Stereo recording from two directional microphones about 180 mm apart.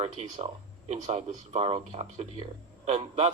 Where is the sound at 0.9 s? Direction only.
40° right (ahead or behind).